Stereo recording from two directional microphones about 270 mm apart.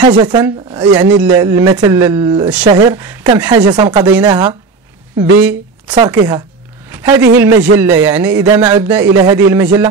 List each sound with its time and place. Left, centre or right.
0.0 s speech: centre
6.9 s a sound: centre
7.3 s speech: centre